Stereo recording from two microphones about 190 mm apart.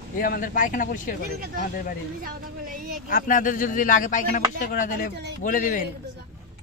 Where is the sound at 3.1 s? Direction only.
45° left (ahead or behind).